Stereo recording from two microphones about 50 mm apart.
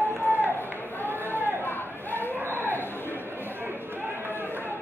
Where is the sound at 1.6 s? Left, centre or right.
Left.